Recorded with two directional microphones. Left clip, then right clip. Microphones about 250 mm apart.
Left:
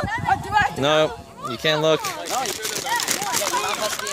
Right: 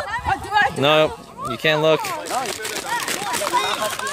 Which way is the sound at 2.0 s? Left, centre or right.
Left.